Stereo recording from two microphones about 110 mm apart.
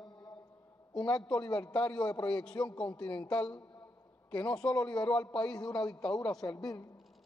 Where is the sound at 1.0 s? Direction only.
40° left (ahead or behind).